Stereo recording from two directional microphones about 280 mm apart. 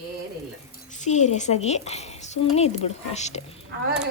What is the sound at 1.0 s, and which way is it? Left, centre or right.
Speech, left.